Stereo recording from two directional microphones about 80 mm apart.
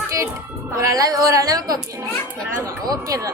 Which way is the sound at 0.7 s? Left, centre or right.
Right.